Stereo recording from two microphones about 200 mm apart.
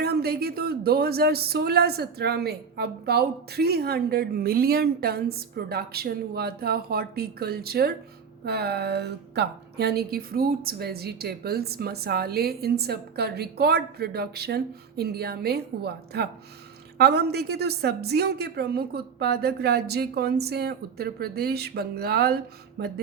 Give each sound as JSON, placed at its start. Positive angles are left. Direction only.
{"t": 0.0, "sound": "speech", "side_deg": -50}